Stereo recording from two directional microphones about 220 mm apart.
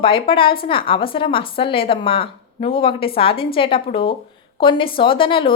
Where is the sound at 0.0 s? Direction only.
25° left (ahead or behind).